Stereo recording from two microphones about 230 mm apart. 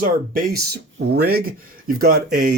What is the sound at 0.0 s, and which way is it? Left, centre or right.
Speech, right.